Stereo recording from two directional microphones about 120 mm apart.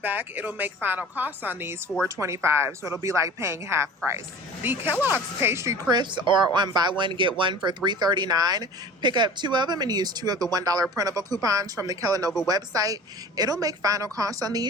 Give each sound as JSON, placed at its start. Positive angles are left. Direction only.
{"t": 0.0, "sound": "a woman's voice", "side_deg": -15}
{"t": 5.9, "sound": "speech", "side_deg": -40}